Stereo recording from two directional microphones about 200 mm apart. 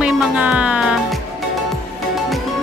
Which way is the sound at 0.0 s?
5° right (ahead or behind).